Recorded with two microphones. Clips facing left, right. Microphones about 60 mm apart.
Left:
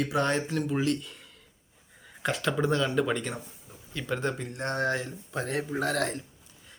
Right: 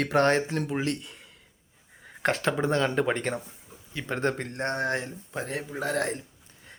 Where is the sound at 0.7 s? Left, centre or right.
Right.